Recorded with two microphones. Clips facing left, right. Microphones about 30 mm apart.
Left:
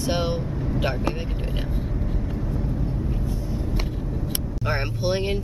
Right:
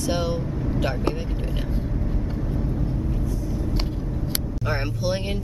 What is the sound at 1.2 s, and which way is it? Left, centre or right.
Speech, centre.